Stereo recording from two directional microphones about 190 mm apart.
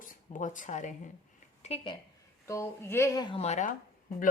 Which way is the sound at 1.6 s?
30° left (ahead or behind).